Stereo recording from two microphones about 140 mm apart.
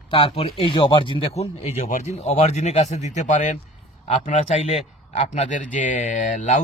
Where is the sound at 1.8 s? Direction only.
60° left (ahead or behind).